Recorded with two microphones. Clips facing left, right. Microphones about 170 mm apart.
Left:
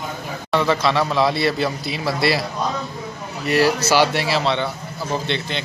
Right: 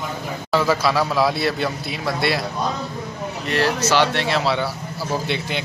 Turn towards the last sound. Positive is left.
turn(degrees=-10)  # may be behind; listen again after turning